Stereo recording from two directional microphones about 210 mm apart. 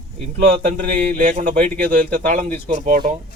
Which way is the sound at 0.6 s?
35° right (ahead or behind).